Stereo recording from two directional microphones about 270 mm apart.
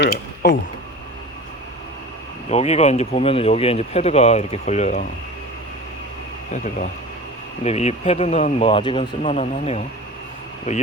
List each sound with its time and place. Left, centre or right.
0.0 s speech: left
2.5 s speech: left
7.6 s speech: left